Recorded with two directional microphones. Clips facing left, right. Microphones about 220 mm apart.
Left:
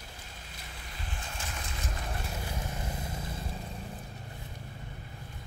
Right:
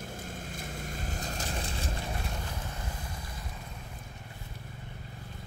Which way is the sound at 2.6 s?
25° left (ahead or behind).